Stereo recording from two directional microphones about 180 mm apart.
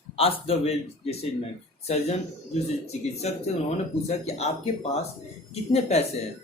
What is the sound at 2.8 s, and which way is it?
A man's voice, 35° left (ahead or behind).